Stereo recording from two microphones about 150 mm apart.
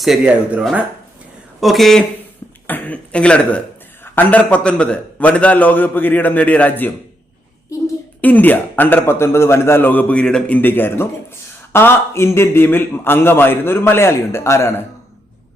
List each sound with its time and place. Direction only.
0.0 s a man's voice: centre (ahead or behind)
8.2 s a man's voice: 10° left (ahead or behind)